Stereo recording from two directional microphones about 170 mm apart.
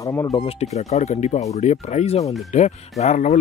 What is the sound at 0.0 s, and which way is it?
Speech, 20° left (ahead or behind).